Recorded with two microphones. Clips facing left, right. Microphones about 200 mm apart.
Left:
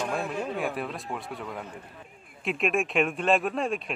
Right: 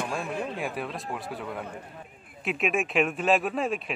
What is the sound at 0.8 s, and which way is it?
Speech, centre (ahead or behind).